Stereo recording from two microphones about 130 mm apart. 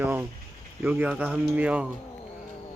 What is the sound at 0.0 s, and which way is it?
Speech, 15° right (ahead or behind).